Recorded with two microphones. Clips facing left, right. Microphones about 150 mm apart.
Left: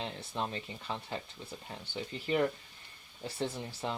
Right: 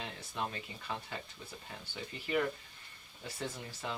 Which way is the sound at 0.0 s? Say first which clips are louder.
Left 3 dB; 25° left (ahead or behind).